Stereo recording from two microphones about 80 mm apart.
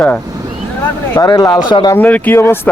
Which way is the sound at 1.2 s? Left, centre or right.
Left.